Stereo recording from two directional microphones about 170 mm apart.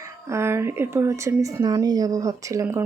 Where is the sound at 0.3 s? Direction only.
15° right (ahead or behind).